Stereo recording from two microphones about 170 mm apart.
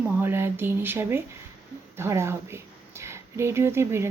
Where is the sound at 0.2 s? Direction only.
15° right (ahead or behind).